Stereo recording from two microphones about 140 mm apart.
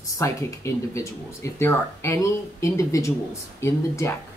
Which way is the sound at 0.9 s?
20° left (ahead or behind).